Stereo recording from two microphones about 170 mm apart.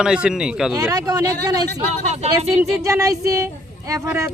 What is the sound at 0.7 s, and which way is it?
Speech, 20° right (ahead or behind).